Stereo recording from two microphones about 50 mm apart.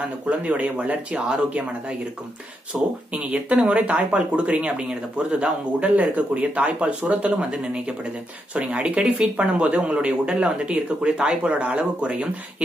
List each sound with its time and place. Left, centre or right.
0.3 s a man's voice: right
2.7 s a man's voice: centre